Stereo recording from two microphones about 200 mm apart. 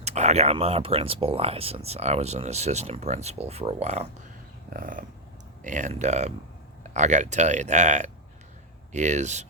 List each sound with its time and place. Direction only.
0.0 s speech: 35° right (ahead or behind)
4.7 s dog: 45° right (ahead or behind)
5.6 s speech: 40° right (ahead or behind)